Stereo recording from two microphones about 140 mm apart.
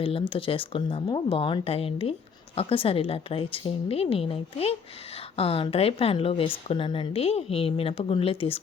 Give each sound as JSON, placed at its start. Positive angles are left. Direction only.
{"t": 0.0, "sound": "a woman's voice", "side_deg": 40}